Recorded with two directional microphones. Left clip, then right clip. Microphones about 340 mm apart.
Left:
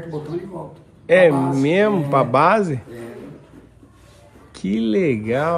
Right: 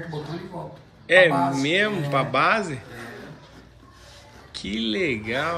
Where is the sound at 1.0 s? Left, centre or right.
Centre.